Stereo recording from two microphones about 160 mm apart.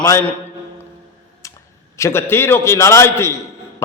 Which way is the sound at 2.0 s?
15° left (ahead or behind).